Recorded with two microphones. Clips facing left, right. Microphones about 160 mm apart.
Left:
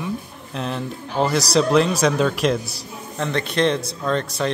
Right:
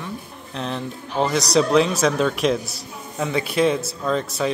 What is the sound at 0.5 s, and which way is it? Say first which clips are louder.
Speech: left 1 dB; centre (ahead or behind).